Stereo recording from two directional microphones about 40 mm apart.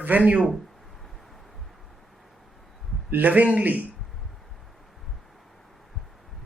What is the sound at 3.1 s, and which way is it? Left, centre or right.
Speech, right.